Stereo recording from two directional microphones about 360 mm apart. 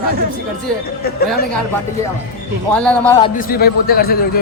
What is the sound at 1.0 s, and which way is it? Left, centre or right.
Speech, left.